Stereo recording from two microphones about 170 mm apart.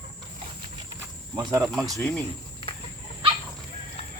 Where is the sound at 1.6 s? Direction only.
Centre (ahead or behind).